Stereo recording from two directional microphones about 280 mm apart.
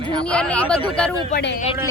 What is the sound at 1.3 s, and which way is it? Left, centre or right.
Music, left.